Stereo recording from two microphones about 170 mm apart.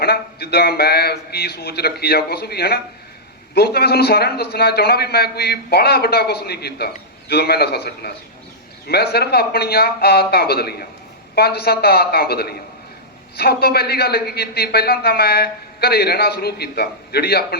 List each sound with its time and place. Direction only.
0.0 s a man's voice: 65° left (ahead or behind)